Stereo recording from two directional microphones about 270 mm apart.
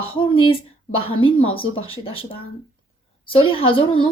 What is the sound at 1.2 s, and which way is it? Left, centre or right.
A woman's voice, centre.